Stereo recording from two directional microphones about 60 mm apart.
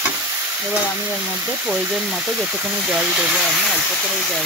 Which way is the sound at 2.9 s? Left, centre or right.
Centre.